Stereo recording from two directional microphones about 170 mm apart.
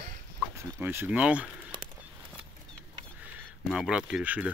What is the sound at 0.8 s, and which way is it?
Speech, 10° right (ahead or behind).